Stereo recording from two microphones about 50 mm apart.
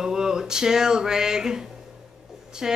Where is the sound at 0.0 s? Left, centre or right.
Centre.